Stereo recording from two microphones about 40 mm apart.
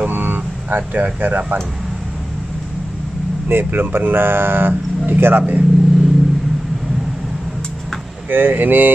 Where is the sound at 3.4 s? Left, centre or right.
Right.